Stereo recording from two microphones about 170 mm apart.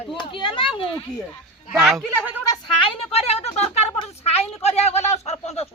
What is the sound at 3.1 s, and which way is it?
A woman's voice, 40° left (ahead or behind).